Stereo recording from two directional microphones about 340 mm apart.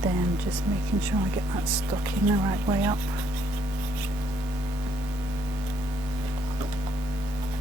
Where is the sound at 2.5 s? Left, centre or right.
Centre.